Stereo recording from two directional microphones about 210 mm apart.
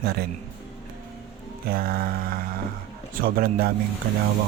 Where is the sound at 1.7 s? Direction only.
45° right (ahead or behind).